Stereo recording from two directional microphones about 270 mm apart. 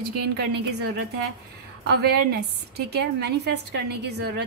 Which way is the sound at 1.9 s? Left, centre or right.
Right.